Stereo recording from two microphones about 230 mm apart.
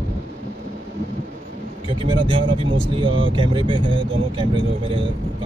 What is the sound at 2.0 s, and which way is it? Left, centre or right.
Speech, right.